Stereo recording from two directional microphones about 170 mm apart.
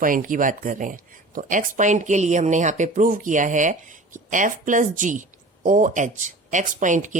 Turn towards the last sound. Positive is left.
turn(degrees=-45)  # may be behind; listen again after turning